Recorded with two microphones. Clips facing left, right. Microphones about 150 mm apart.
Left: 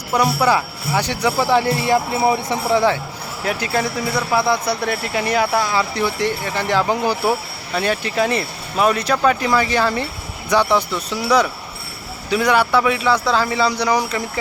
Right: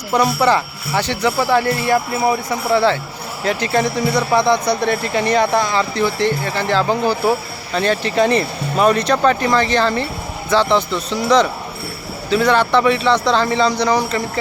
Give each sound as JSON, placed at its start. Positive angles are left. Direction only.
{"t": 0.1, "sound": "speech", "side_deg": 10}
{"t": 12.3, "sound": "speech", "side_deg": 10}